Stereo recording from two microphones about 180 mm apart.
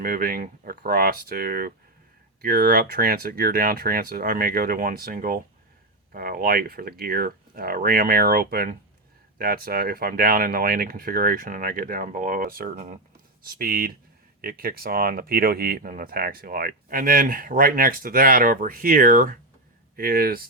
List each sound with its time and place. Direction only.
0.0 s speech: 55° right (ahead or behind)